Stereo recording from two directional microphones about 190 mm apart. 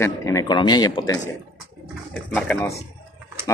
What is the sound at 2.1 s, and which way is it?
Speech, 5° left (ahead or behind).